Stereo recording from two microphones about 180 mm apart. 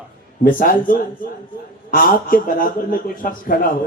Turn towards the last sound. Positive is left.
turn(degrees=50)  # may be behind; listen again after turning